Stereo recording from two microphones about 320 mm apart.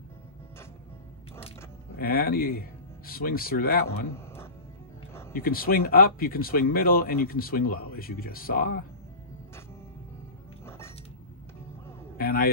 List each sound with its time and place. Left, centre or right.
2.0 s speech: left
4.1 s a sound: centre
5.3 s speech: left
12.2 s a man's voice: left